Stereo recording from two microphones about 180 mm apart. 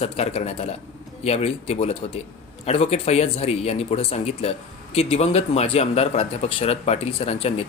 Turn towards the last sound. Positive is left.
turn(degrees=35)  # may be behind; listen again after turning